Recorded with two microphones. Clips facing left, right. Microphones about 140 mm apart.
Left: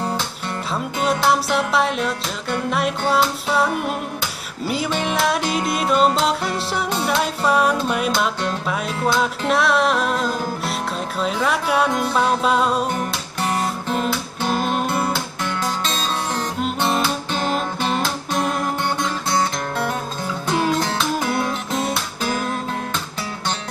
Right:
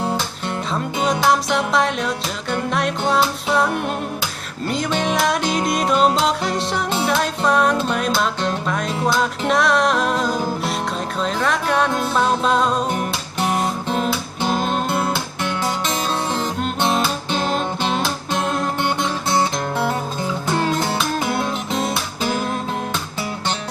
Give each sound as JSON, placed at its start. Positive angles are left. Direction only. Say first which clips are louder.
{"t": 0.7, "sound": "music", "louder": "even", "side_deg": 5}
{"t": 15.8, "sound": "music", "louder": "right 2 dB", "side_deg": -20}
{"t": 16.3, "sound": "music", "louder": "right 1 dB", "side_deg": 0}
{"t": 20.8, "sound": "music", "louder": "right 1 dB", "side_deg": -10}